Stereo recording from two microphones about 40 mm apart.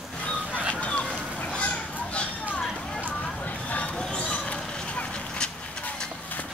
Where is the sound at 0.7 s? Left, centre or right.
Left.